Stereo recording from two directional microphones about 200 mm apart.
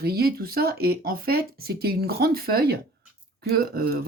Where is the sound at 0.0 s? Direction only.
50° right (ahead or behind).